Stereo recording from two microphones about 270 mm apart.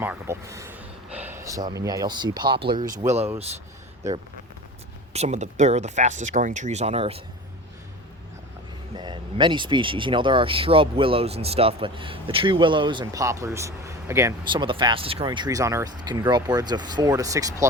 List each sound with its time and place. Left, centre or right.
0.0 s speech: centre
5.1 s speech: right
9.0 s speech: centre